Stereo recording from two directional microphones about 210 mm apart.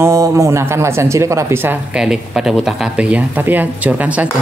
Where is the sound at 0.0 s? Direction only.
15° right (ahead or behind).